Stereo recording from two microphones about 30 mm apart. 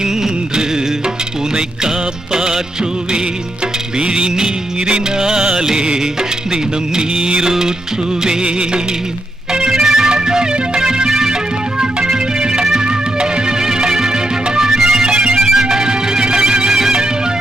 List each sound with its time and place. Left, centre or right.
0.0 s music: right
2.3 s music of bollywood: right
3.9 s music: right
9.5 s music: right